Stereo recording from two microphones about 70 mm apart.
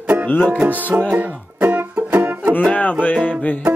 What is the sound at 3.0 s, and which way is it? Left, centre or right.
Music, left.